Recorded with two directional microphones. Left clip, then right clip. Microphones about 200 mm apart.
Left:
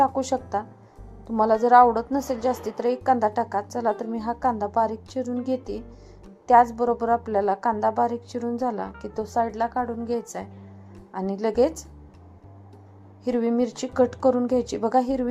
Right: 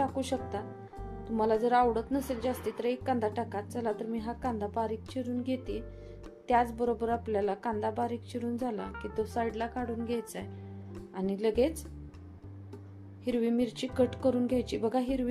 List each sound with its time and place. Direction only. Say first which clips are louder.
0.0 s a woman's voice: left 10 dB; 5° left (ahead or behind)
13.2 s a woman's voice: left 7 dB; 5° left (ahead or behind)